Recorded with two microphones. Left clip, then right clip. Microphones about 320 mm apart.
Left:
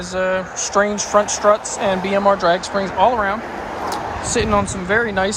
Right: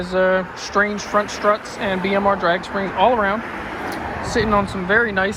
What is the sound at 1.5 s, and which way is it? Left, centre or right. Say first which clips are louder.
Speech: left 4 dB; left.